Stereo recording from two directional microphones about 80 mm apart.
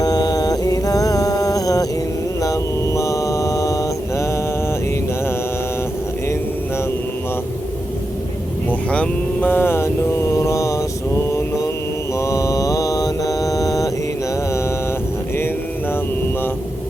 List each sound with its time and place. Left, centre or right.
0.0 s mantra: left
2.4 s a sound: left
8.9 s mantra: centre; by 10.8 s left
12.2 s mantra: left